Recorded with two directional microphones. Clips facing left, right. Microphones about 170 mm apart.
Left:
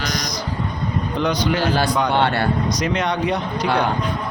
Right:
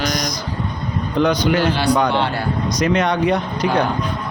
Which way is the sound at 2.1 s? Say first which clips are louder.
Left 1 dB; 60° left (ahead or behind).